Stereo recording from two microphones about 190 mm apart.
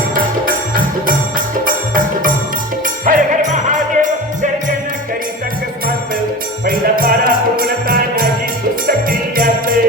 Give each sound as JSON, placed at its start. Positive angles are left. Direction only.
{"t": 0.1, "sound": "music", "side_deg": -45}
{"t": 6.7, "sound": "music", "side_deg": -50}